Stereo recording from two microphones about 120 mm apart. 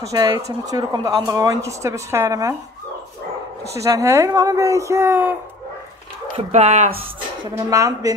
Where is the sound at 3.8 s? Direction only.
25° right (ahead or behind).